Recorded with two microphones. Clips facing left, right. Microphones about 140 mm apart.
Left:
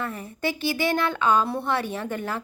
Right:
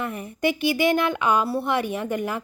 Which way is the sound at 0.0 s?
15° right (ahead or behind).